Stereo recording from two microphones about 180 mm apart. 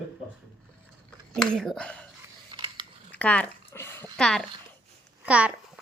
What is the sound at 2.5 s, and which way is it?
Biting, 25° right (ahead or behind).